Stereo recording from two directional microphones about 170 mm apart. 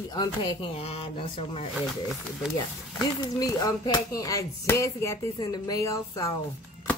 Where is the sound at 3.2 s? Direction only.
25° left (ahead or behind).